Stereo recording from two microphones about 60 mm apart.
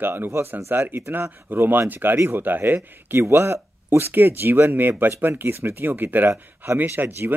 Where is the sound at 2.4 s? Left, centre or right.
Right.